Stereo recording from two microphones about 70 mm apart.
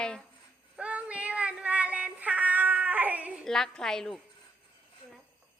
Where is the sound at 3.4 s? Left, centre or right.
Centre.